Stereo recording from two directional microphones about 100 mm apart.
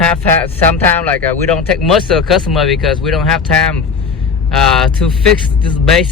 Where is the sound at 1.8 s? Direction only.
5° left (ahead or behind).